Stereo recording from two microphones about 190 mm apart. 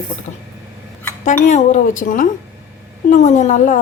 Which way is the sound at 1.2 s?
40° left (ahead or behind).